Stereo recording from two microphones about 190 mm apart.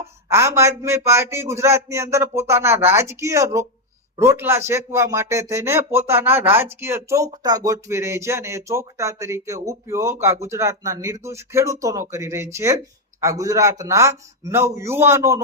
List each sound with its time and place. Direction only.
0.3 s speech: 15° right (ahead or behind)